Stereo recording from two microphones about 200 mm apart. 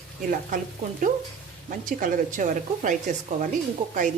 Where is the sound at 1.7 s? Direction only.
40° right (ahead or behind).